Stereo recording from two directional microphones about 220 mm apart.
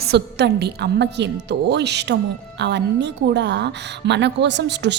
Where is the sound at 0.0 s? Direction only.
50° right (ahead or behind).